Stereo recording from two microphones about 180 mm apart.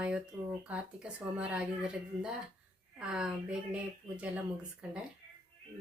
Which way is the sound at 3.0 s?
5° right (ahead or behind).